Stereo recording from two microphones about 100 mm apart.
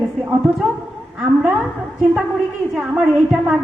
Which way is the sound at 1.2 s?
5° right (ahead or behind).